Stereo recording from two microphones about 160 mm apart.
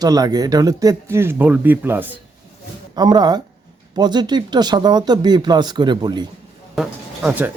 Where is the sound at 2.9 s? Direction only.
25° right (ahead or behind).